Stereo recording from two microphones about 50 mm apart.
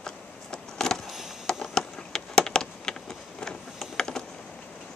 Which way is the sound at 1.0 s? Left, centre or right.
Centre.